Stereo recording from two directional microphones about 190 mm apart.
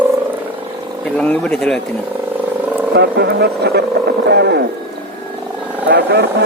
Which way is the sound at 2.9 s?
60° right (ahead or behind).